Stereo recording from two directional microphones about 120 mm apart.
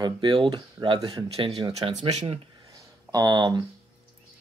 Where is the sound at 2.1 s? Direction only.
70° right (ahead or behind).